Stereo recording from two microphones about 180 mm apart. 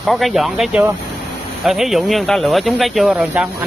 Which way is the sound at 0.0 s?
Centre (ahead or behind).